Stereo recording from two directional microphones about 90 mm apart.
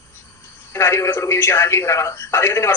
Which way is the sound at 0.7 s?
30° left (ahead or behind).